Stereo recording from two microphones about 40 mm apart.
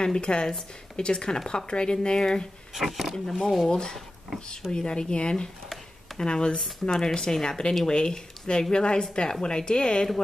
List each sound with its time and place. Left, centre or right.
0.0 s speech: left
2.7 s speech: centre
3.6 s speech: centre
6.6 s speech: centre